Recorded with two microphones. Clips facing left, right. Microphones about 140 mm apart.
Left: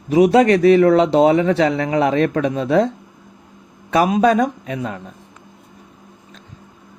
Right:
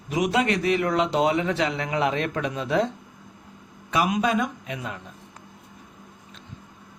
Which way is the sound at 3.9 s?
40° left (ahead or behind).